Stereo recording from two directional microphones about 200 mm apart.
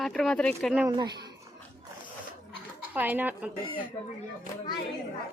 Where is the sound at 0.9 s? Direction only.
20° right (ahead or behind).